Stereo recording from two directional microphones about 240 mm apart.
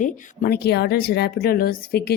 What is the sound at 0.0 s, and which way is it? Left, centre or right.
Speech, left.